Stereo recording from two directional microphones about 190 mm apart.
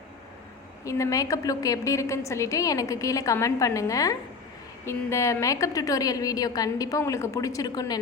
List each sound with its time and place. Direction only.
0.9 s a woman's voice: 15° left (ahead or behind)